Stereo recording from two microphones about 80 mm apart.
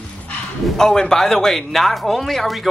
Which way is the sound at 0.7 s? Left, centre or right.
Centre.